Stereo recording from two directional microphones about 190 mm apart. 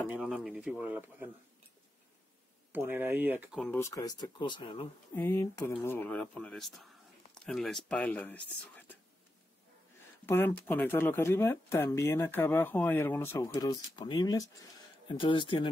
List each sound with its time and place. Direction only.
0.1 s speech: centre (ahead or behind)
2.7 s speech: 10° right (ahead or behind)
3.5 s speech: 10° left (ahead or behind); by 4.8 s 25° left (ahead or behind)
5.1 s speech: 10° left (ahead or behind)
10.2 s speech: 10° left (ahead or behind); by 15.7 s 25° left (ahead or behind)